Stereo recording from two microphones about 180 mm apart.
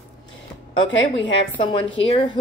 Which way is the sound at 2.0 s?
30° left (ahead or behind).